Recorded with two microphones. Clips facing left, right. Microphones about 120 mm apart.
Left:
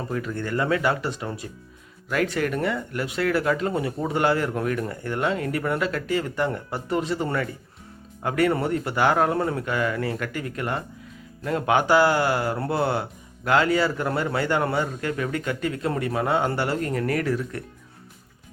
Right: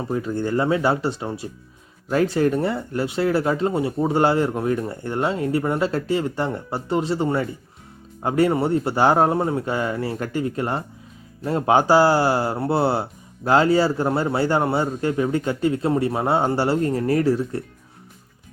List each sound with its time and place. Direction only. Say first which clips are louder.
0.0 s speech: right 5 dB; 25° right (ahead or behind)